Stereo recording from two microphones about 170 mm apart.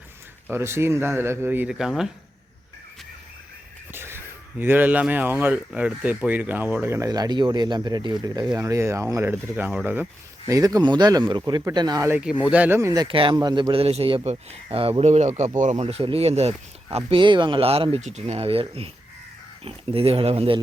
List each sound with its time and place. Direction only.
0.4 s speech: 15° right (ahead or behind)
3.9 s a man's voice: 15° right (ahead or behind); by 20.6 s 35° right (ahead or behind)